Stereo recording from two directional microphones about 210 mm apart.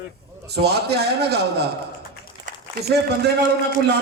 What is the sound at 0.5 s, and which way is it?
A man's voice, 50° right (ahead or behind).